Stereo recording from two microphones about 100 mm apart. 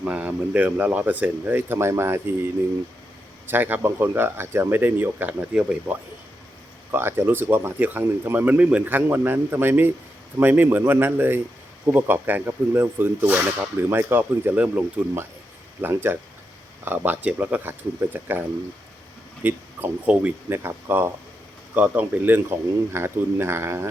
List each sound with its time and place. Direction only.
0.0 s speech: 15° right (ahead or behind)
6.9 s speech: 20° right (ahead or behind)